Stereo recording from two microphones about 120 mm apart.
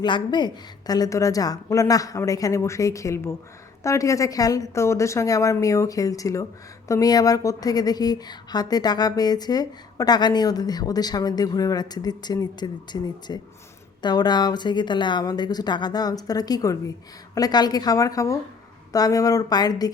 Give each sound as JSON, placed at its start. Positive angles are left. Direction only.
{"t": 0.0, "sound": "a woman's voice", "side_deg": 40}